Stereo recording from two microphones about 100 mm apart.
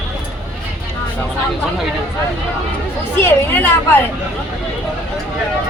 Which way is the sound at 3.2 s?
20° left (ahead or behind).